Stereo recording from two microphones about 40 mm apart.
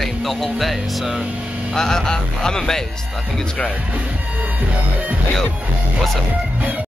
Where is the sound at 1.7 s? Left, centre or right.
Centre.